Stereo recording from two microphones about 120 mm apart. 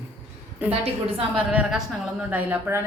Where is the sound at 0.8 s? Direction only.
50° right (ahead or behind).